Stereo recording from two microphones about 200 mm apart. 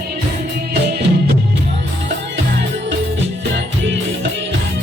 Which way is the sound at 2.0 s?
60° right (ahead or behind).